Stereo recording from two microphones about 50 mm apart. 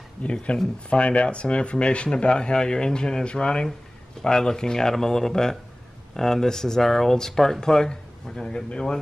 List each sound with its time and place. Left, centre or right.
0.2 s speech: left